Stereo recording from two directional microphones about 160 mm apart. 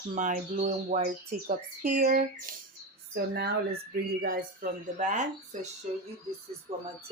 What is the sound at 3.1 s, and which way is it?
Speech, 90° right.